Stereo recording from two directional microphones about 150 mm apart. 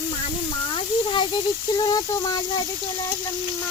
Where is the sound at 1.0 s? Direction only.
30° left (ahead or behind).